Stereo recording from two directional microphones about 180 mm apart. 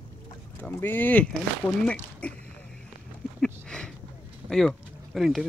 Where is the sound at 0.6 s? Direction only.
10° left (ahead or behind).